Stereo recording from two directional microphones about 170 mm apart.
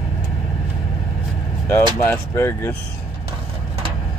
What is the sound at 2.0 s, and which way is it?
Speech, 15° left (ahead or behind).